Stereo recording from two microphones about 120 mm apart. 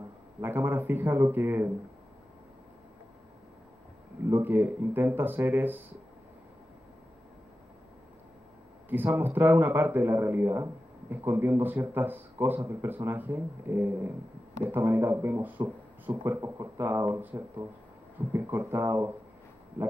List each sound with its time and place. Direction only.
0.4 s a man's voice: 15° right (ahead or behind)
4.3 s a man's voice: 20° right (ahead or behind)
8.8 s a man's voice: 15° right (ahead or behind)